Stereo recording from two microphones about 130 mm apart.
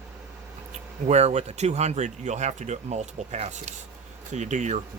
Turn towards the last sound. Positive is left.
turn(degrees=-65)  # may be behind; listen again after turning